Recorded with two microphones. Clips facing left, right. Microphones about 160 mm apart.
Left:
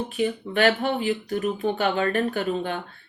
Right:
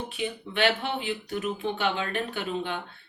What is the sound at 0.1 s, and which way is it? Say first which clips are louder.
Speech: left 7 dB; 45° left (ahead or behind).